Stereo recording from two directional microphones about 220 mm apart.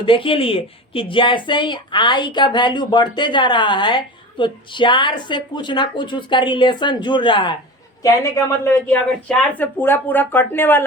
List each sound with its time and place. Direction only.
0.0 s a woman's voice: 25° left (ahead or behind)